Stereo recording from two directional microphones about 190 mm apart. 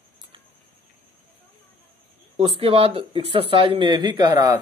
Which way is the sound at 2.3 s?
30° right (ahead or behind).